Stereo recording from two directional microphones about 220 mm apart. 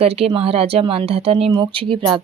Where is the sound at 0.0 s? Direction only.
25° right (ahead or behind).